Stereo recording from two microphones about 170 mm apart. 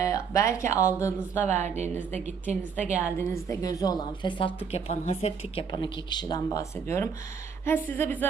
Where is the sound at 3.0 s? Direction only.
15° left (ahead or behind).